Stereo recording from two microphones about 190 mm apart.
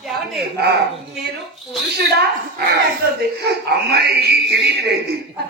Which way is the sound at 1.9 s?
60° right (ahead or behind).